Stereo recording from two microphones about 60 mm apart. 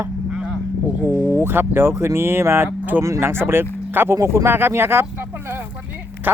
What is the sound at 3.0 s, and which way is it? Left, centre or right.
Speech, right.